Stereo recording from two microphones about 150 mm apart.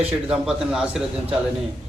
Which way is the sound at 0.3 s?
5° right (ahead or behind).